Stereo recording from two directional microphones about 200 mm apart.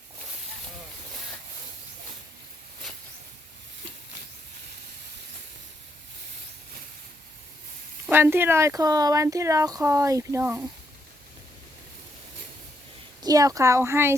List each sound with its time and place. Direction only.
8.0 s a woman's voice: 10° right (ahead or behind)
13.2 s a woman's voice: 15° right (ahead or behind)